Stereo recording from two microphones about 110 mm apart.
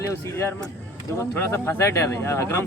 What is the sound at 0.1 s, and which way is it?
Speech, 25° left (ahead or behind).